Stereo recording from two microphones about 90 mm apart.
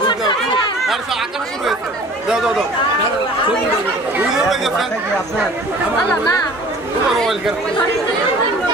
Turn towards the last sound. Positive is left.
turn(degrees=0)  # may be behind; listen again after turning